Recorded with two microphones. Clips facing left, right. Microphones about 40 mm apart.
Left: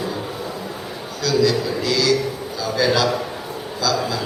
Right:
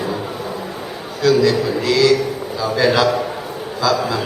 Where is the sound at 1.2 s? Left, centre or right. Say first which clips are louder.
Right 4 dB; right.